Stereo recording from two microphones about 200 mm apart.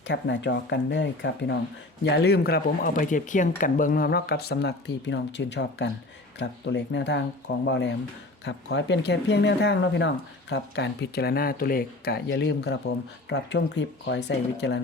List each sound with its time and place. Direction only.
0.1 s speech: 65° left (ahead or behind)